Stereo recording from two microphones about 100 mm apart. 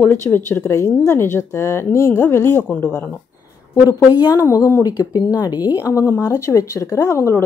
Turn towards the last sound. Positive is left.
turn(degrees=30)  # may be behind; listen again after turning